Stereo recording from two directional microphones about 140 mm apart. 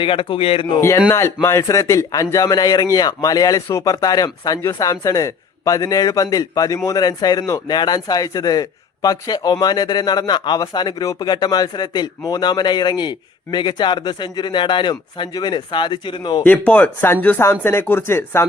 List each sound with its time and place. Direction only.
0.0 s speech: 40° left (ahead or behind)
0.8 s speech: 20° left (ahead or behind)
16.4 s speech: 10° left (ahead or behind)